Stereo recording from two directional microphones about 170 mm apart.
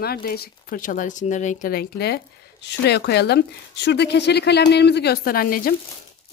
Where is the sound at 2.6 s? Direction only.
80° left; by 5.7 s 55° left (ahead or behind).